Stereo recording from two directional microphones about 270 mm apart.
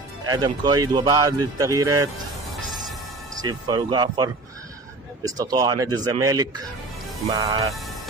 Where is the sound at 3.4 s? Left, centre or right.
Centre.